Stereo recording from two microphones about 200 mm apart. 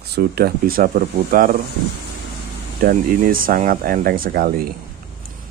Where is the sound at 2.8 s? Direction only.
45° right (ahead or behind).